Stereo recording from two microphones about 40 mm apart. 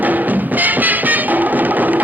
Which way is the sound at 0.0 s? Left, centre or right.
Right.